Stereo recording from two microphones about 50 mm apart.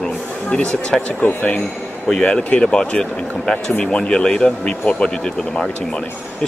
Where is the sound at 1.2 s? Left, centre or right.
Left.